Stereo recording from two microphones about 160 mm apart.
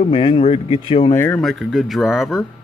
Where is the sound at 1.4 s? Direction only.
Centre (ahead or behind).